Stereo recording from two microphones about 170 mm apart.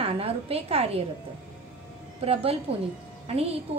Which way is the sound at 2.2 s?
35° right (ahead or behind).